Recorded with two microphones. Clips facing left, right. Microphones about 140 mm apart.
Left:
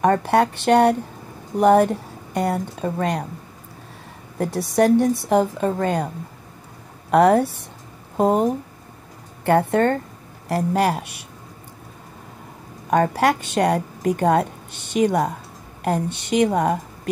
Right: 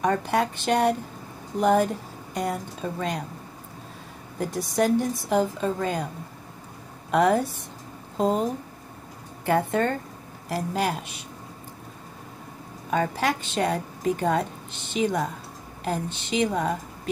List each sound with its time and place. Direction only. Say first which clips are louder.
0.0 s a woman's voice: left 6 dB; 60° left (ahead or behind)
4.4 s a woman's voice: left 6 dB; 65° left (ahead or behind)
7.1 s a woman's voice: left 6 dB; 60° left (ahead or behind)
9.5 s a woman's voice: left 6 dB; 60° left (ahead or behind)
13.1 s a woman's voice: left 7 dB; 70° left (ahead or behind)